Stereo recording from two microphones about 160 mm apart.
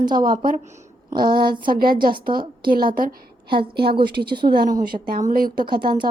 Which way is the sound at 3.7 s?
85° right.